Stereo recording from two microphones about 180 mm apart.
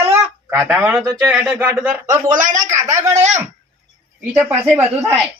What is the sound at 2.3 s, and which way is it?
Speech, 45° right (ahead or behind).